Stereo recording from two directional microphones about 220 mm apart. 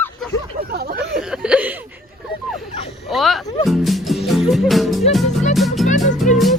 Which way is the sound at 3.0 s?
Centre (ahead or behind).